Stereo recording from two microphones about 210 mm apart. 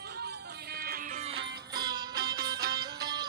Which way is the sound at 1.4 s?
55° right (ahead or behind).